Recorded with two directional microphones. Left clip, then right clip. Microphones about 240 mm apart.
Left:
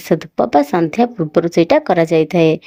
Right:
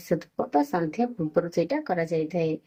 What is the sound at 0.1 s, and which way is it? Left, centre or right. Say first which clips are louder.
Speech: left 12 dB; left.